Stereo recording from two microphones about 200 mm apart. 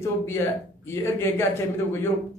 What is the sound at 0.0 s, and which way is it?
Speech, 10° left (ahead or behind).